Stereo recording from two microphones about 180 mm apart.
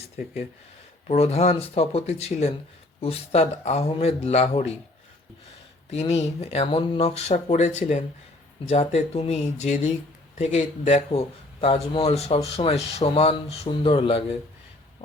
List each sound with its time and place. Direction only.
1.0 s speech: 35° left (ahead or behind)
5.9 s speech: 35° left (ahead or behind)